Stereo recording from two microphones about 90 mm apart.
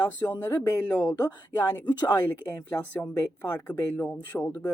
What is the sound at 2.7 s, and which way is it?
Speech, 25° left (ahead or behind).